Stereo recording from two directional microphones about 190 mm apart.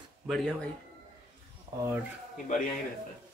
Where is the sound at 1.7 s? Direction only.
20° right (ahead or behind).